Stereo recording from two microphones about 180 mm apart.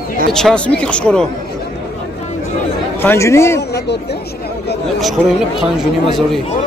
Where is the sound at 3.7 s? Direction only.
65° left (ahead or behind).